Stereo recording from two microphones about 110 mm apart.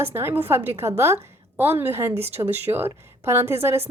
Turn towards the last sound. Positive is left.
turn(degrees=-20)  # may be behind; listen again after turning